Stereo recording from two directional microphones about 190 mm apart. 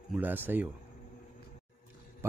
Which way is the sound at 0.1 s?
10° right (ahead or behind).